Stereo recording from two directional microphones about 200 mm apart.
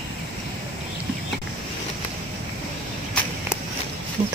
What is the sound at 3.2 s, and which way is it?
Walk, 5° left (ahead or behind).